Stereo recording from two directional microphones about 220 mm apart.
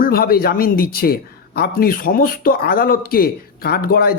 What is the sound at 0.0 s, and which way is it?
Speech, 40° left (ahead or behind).